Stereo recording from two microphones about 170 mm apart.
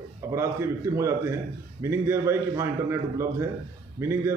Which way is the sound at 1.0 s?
15° right (ahead or behind).